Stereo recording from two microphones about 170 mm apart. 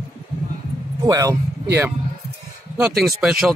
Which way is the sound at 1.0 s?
20° right (ahead or behind).